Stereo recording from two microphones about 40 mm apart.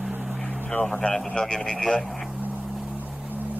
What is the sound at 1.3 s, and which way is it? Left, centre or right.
Speech, centre.